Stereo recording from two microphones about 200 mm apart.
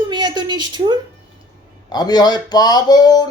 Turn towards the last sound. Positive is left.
turn(degrees=20)  # may be behind; listen again after turning